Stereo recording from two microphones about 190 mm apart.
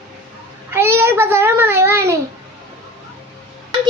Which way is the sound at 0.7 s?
10° right (ahead or behind).